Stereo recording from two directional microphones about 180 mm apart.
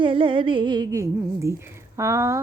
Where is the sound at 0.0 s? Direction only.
30° right (ahead or behind).